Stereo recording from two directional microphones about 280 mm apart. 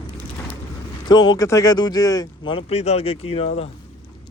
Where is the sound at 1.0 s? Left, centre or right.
Centre.